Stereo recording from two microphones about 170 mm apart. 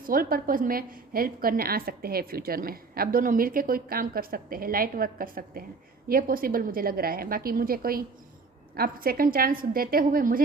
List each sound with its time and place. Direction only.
0.0 s a woman's voice: 55° right (ahead or behind)